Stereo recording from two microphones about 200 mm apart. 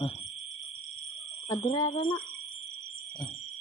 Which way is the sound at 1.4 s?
20° left (ahead or behind).